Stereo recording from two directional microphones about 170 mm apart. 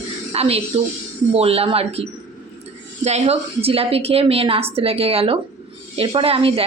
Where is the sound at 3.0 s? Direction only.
40° right (ahead or behind).